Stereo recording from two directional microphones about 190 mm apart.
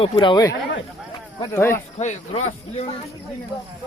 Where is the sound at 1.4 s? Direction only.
15° left (ahead or behind).